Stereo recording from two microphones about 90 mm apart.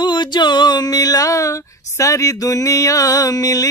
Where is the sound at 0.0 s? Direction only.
55° left (ahead or behind).